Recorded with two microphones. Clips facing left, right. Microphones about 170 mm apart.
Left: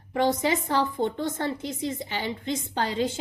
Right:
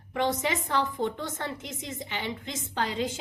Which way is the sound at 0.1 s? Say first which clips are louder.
Left 4 dB; 35° left (ahead or behind).